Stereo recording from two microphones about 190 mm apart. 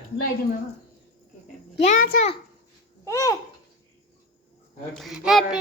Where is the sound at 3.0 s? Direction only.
15° left (ahead or behind).